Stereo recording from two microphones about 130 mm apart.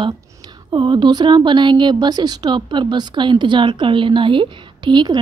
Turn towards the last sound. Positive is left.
turn(degrees=-35)  # may be behind; listen again after turning